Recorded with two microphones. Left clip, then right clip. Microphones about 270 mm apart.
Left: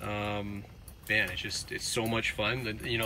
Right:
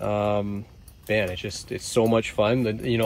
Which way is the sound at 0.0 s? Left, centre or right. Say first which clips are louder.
Right 11 dB; centre.